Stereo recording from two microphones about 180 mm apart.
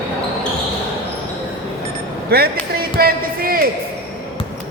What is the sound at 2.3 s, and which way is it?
Speech, 60° right (ahead or behind).